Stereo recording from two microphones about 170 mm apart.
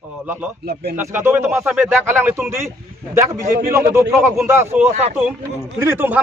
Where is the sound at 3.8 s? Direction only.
15° right (ahead or behind).